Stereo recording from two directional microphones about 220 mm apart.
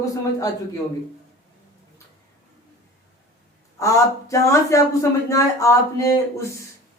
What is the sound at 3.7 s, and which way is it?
Speech, 15° left (ahead or behind).